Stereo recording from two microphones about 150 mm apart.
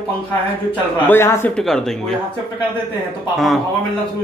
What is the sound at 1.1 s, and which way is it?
Speech, 15° left (ahead or behind).